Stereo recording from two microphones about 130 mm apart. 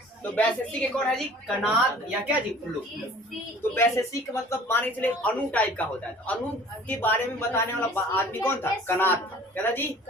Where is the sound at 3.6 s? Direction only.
20° left (ahead or behind).